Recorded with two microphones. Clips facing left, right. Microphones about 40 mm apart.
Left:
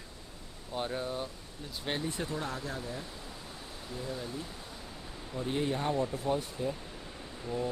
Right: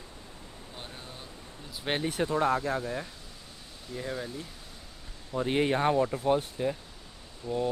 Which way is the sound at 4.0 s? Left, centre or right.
Right.